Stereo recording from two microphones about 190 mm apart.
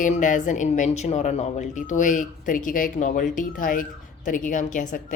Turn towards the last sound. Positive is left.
turn(degrees=40)  # may be behind; listen again after turning